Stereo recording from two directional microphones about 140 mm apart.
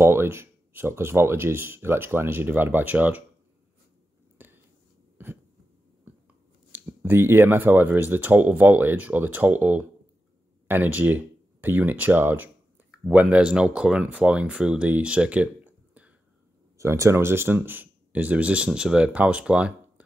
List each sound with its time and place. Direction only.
0.0 s speech: 15° right (ahead or behind)
4.4 s a sound: 15° right (ahead or behind)
5.1 s cough: 15° right (ahead or behind)
6.7 s speech: 15° right (ahead or behind)
16.7 s speech: 20° right (ahead or behind)